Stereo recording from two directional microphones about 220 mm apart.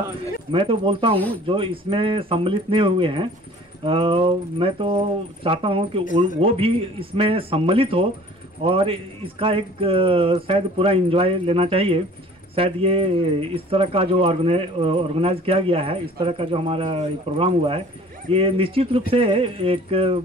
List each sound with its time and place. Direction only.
0.5 s speech: 25° right (ahead or behind)